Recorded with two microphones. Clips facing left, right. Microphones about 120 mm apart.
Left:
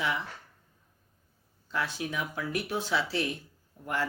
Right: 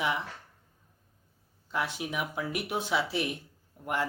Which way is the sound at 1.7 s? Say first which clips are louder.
Even; 20° right (ahead or behind).